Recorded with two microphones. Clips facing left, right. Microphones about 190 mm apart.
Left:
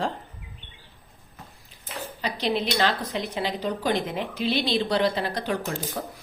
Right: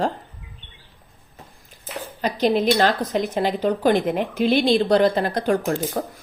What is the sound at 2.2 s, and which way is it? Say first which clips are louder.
Speech: right 7 dB; 45° right (ahead or behind).